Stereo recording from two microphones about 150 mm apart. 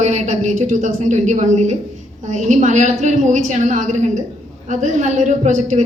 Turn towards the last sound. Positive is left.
turn(degrees=-55)  # may be behind; listen again after turning